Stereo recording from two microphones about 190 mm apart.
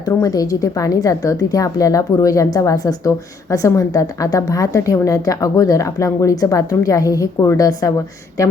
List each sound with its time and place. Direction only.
0.0 s a woman's voice: 20° left (ahead or behind)